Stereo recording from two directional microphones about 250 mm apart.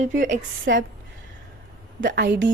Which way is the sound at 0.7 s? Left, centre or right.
Right.